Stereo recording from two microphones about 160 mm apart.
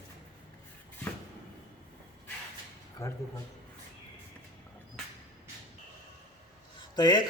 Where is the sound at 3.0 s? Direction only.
20° left (ahead or behind).